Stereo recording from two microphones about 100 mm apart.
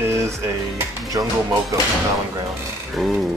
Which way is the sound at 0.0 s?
30° right (ahead or behind).